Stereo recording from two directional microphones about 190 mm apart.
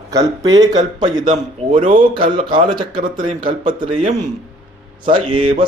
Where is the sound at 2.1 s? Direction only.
25° right (ahead or behind).